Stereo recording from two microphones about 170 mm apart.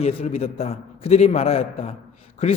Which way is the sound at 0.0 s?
40° left (ahead or behind).